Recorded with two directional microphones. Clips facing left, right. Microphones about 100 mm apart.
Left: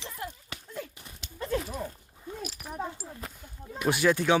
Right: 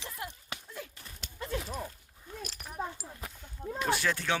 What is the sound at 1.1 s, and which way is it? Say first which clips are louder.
Clip-clop: left 6 dB; centre (ahead or behind).